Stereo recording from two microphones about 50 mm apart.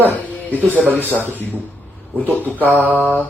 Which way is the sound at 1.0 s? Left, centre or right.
Right.